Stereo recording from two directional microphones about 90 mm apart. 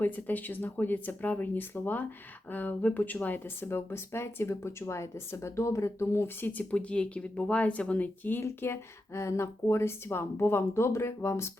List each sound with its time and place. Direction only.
0.0 s speech: 20° left (ahead or behind)